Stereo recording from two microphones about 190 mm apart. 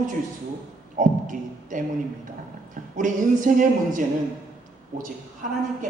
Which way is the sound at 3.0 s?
45° right (ahead or behind).